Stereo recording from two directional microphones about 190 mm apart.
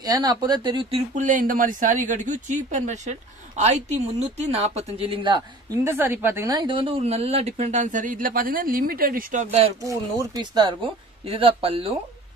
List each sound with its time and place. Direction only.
0.0 s speech: 20° right (ahead or behind)
5.9 s speech: 10° right (ahead or behind); by 9.7 s 35° right (ahead or behind)
9.8 s speech: 20° right (ahead or behind)